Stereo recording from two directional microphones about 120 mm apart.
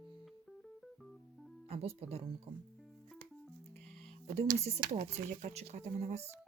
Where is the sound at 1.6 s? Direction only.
55° right (ahead or behind).